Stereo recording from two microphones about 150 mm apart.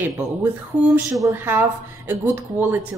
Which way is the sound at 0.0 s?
10° right (ahead or behind).